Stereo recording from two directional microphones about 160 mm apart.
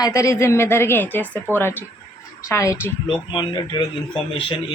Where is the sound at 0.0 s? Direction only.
20° left (ahead or behind).